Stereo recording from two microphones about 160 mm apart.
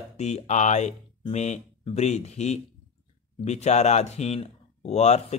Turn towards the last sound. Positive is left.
turn(degrees=45)  # may be behind; listen again after turning